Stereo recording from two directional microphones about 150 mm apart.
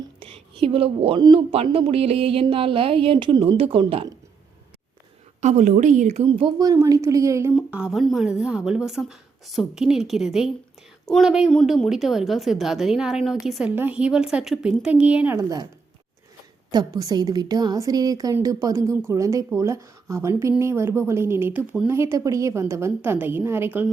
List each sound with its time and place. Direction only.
0.2 s speech: 40° right (ahead or behind)
5.4 s a woman's voice: 50° right (ahead or behind)
6.3 s a woman's voice: 30° right (ahead or behind)
7.5 s a woman's voice: 5° right (ahead or behind)
15.4 s a woman's voice: 25° right (ahead or behind)
16.7 s a woman's voice: 25° right (ahead or behind)